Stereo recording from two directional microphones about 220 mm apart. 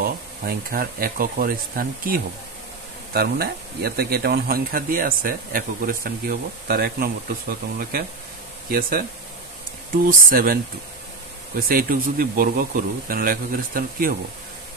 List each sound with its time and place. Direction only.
0.0 s speech: 40° right (ahead or behind)
10.2 s speech: 40° right (ahead or behind)
11.7 s speech: 40° right (ahead or behind)